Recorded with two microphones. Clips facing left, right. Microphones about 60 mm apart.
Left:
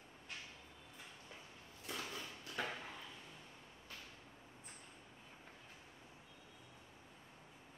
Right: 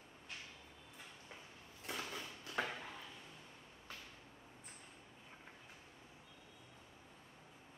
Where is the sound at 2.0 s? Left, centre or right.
Centre.